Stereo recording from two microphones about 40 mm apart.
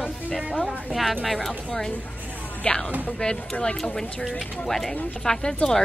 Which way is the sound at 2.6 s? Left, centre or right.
Centre.